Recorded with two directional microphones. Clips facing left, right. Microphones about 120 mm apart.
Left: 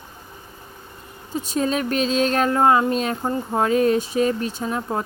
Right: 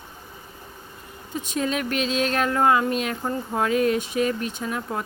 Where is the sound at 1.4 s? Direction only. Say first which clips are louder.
Left 3 dB; 35° left (ahead or behind).